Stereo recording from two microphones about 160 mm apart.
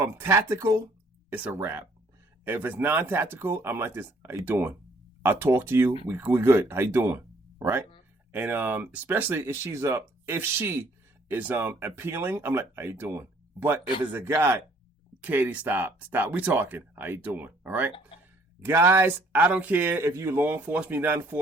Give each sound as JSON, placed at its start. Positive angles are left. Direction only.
{"t": 0.0, "sound": "speech", "side_deg": -15}